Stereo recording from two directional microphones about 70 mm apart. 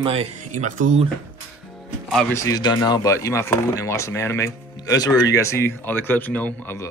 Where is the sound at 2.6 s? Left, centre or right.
Left.